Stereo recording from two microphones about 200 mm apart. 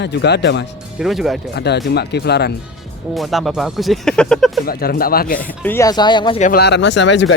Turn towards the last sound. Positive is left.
turn(degrees=60)  # may be behind; listen again after turning